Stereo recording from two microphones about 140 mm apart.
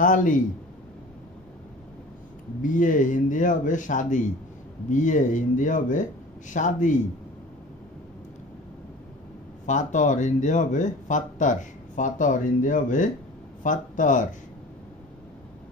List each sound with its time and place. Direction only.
0.0 s speech: 70° left (ahead or behind)
2.6 s speech: 70° left (ahead or behind)
9.7 s speech: 60° left (ahead or behind)